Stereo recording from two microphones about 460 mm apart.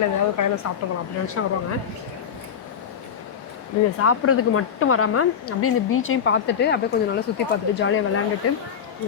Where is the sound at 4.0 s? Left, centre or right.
Left.